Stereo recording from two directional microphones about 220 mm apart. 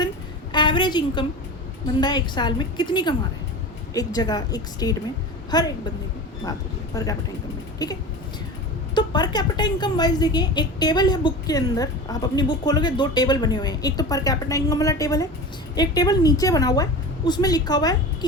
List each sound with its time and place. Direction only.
0.5 s a woman's voice: 20° left (ahead or behind)
6.9 s a woman's voice: 15° left (ahead or behind)
9.0 s a woman's voice: 20° left (ahead or behind)